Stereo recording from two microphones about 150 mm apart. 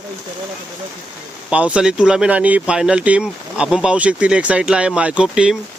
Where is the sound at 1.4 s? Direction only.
10° right (ahead or behind).